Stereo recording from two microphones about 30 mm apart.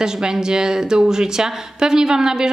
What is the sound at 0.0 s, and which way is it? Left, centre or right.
Speech, right.